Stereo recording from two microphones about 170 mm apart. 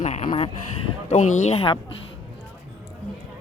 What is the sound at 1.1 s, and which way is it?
Speech, 45° left (ahead or behind).